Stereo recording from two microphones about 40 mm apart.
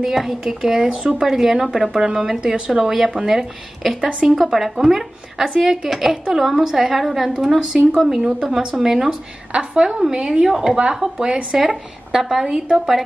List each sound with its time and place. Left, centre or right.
0.0 s a woman's voice: centre
8.2 s speech: right
8.5 s a woman's voice: centre
11.5 s a woman's voice: centre
12.4 s speech: centre
12.7 s a woman's voice: centre